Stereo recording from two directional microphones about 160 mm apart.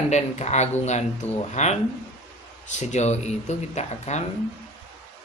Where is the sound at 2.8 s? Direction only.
45° left (ahead or behind).